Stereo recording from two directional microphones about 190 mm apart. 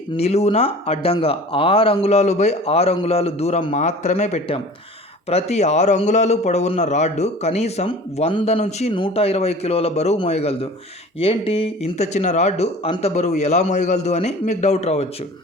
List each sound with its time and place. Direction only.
0.1 s a man's voice: 35° left (ahead or behind)